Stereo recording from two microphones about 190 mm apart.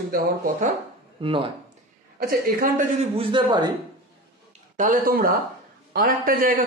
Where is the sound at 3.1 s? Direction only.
25° right (ahead or behind).